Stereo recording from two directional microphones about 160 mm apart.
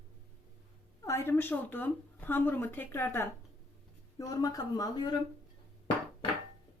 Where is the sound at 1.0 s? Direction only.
15° left (ahead or behind).